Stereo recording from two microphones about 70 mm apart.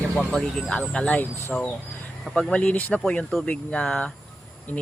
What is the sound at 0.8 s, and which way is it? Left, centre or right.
Speech, centre.